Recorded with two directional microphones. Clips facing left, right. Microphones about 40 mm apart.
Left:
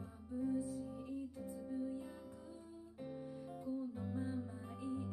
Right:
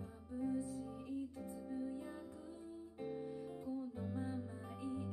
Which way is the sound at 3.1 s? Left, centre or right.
Right.